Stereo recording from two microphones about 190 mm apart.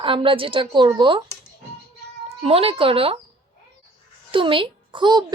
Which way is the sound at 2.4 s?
30° right (ahead or behind).